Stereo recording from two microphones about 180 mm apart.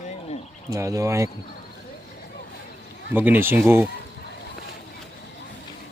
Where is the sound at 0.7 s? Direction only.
15° right (ahead or behind).